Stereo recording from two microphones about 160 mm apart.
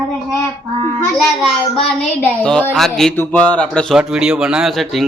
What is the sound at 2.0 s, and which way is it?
Speech, 5° left (ahead or behind).